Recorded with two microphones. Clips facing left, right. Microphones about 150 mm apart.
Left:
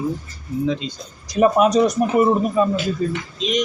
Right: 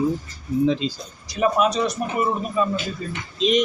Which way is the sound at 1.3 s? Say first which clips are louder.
Left 5 dB; 40° left (ahead or behind).